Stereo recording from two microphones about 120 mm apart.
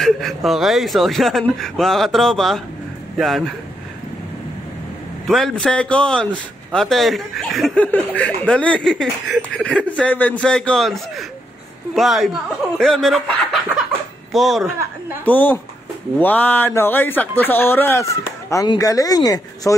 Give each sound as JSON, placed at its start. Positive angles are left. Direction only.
{"t": 0.0, "sound": "a man's voice", "side_deg": 0}
{"t": 5.2, "sound": "a man's voice", "side_deg": 5}
{"t": 7.8, "sound": "a man's voice", "side_deg": 10}
{"t": 15.2, "sound": "a man's voice", "side_deg": 15}